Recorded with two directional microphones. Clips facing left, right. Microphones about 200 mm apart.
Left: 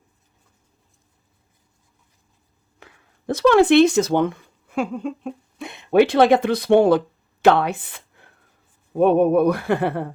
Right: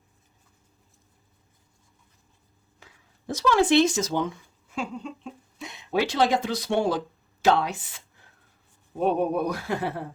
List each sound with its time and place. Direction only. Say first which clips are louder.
2.8 s speech: left 8 dB; 60° left (ahead or behind)